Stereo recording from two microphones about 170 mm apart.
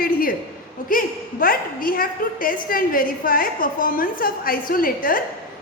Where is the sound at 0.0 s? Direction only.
60° left (ahead or behind).